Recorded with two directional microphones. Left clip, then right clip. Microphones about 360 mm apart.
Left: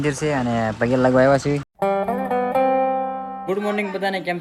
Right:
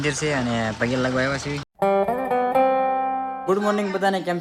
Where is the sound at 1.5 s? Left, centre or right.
Centre.